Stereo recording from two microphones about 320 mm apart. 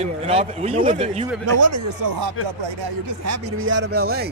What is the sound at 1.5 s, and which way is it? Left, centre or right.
Speech, right.